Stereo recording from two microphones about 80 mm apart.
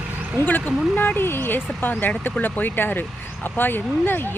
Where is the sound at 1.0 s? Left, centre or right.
Left.